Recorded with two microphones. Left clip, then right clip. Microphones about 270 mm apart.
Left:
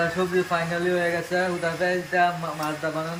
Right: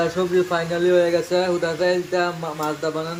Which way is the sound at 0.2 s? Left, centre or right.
Centre.